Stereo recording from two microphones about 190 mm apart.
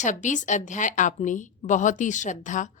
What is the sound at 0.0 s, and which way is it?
A woman's voice, 40° left (ahead or behind).